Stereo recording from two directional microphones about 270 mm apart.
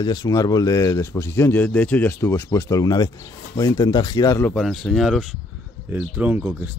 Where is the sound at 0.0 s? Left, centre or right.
Centre.